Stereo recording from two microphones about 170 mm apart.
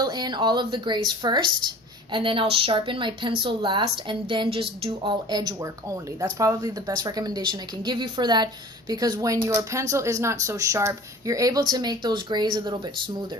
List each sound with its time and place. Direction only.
0.0 s a woman's voice: 25° right (ahead or behind)